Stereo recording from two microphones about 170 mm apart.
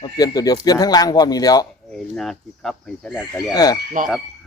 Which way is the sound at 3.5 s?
20° left (ahead or behind).